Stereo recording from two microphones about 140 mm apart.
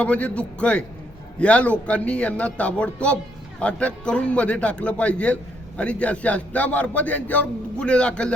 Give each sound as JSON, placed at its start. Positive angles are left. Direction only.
{"t": 0.0, "sound": "a man's voice", "side_deg": 10}